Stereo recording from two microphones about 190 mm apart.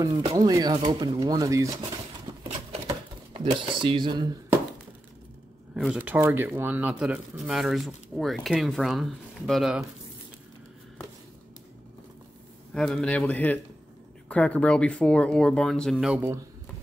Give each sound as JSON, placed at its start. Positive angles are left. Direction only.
{"t": 0.3, "sound": "speech", "side_deg": -20}
{"t": 2.4, "sound": "a sound", "side_deg": -35}
{"t": 2.9, "sound": "dishes", "side_deg": -25}
{"t": 5.8, "sound": "speech", "side_deg": -5}
{"t": 12.7, "sound": "speech", "side_deg": 5}